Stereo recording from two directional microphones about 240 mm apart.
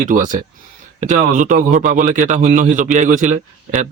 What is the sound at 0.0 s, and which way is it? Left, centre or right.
A man's voice, right.